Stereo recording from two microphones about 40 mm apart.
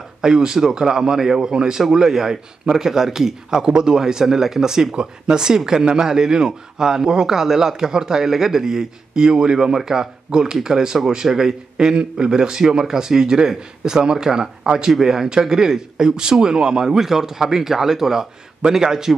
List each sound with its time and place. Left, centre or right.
0.2 s speech: centre